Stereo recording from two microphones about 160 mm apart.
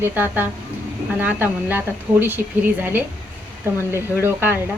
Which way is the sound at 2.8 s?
10° right (ahead or behind).